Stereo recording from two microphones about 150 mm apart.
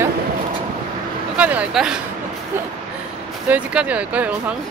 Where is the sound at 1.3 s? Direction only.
10° right (ahead or behind).